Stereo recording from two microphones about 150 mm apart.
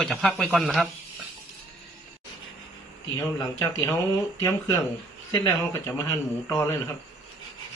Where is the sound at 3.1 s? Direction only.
20° left (ahead or behind).